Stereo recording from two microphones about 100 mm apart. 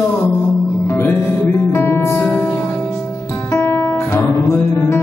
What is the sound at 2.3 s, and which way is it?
Music, 15° left (ahead or behind).